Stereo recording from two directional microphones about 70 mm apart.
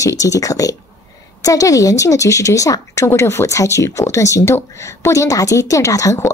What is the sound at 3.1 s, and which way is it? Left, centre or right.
A woman's voice, left.